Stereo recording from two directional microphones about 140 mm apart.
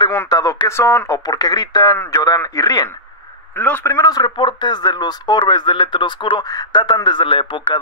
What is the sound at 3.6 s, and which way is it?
Speech, 10° left (ahead or behind).